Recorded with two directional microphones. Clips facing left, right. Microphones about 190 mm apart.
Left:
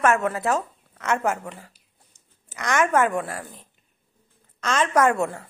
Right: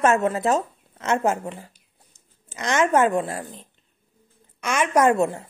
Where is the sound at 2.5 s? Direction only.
20° right (ahead or behind).